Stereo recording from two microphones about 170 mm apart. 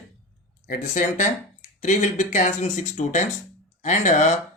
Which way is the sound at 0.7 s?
45° left (ahead or behind).